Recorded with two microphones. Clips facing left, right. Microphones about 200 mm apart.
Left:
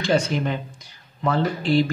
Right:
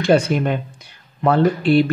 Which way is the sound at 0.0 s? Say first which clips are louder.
Right 5 dB; 55° right (ahead or behind).